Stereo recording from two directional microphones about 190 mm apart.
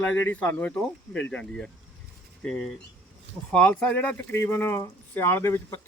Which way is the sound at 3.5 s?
5° left (ahead or behind).